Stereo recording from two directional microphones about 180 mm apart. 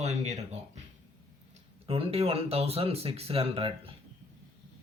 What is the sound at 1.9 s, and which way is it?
A man's voice, 35° right (ahead or behind).